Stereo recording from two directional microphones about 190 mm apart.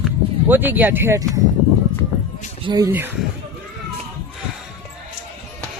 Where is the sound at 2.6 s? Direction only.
20° right (ahead or behind).